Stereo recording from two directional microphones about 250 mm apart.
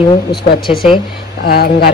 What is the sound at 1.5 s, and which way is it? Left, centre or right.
Speech, left.